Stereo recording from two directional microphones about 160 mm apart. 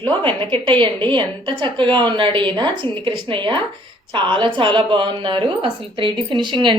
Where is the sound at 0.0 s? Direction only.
30° right (ahead or behind).